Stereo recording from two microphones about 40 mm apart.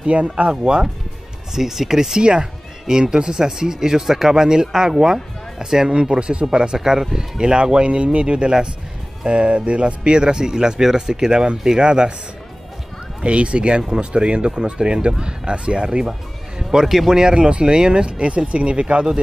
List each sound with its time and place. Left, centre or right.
0.0 s speech: right
1.5 s speech: centre
11.8 s speech: centre
13.2 s speech: right
16.1 s music: centre
16.8 s speech: centre
17.1 s speech: centre